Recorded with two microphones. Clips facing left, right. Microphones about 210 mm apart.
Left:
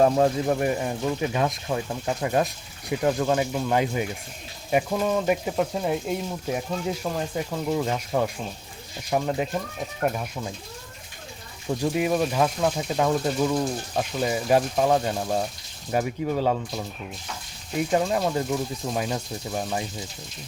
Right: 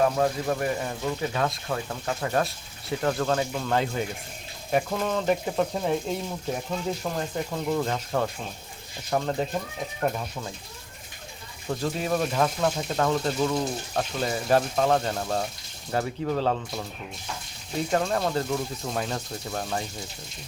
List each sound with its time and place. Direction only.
0.0 s speech: 25° left (ahead or behind)
11.7 s speech: 15° left (ahead or behind)
17.9 s speech: 10° left (ahead or behind)